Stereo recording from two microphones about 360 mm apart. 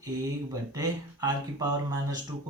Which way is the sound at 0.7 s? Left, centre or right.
Centre.